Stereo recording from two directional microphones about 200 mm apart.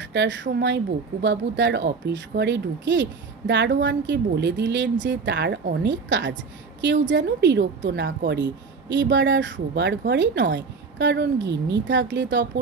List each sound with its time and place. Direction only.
0.0 s speech: 60° right (ahead or behind)